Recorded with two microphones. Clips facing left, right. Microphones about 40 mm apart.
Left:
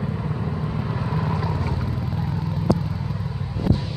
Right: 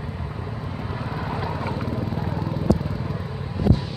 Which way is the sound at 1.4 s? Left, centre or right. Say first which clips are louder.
Left 1 dB; right.